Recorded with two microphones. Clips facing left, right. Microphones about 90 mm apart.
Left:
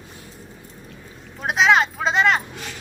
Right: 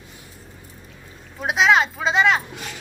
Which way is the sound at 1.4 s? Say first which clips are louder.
Even; centre (ahead or behind).